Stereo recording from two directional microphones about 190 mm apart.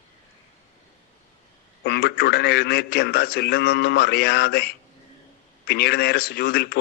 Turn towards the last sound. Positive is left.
turn(degrees=60)  # may be behind; listen again after turning